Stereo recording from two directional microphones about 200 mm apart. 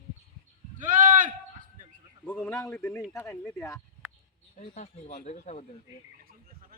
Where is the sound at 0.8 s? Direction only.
40° right (ahead or behind).